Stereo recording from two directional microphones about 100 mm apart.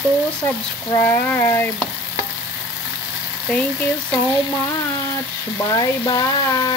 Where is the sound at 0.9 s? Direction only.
20° left (ahead or behind).